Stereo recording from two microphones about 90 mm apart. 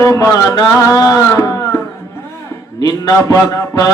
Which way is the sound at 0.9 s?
40° left (ahead or behind).